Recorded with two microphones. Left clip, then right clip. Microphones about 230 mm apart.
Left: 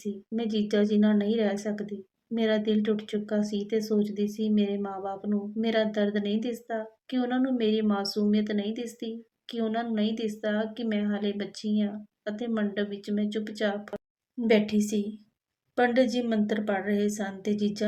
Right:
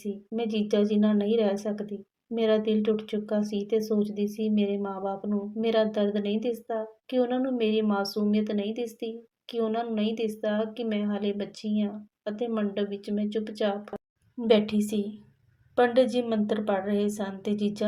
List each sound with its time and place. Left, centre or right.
0.0 s a woman's voice: centre